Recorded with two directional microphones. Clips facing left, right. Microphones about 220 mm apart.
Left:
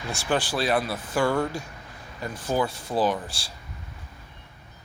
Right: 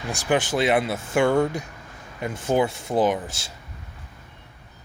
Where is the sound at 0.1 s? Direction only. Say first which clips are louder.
Right 4 dB; 15° right (ahead or behind).